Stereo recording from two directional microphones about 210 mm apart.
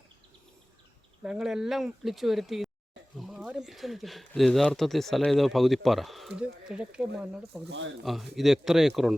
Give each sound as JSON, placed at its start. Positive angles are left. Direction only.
{"t": 1.2, "sound": "speech", "side_deg": -5}
{"t": 7.7, "sound": "speech", "side_deg": -60}
{"t": 8.0, "sound": "speech", "side_deg": 0}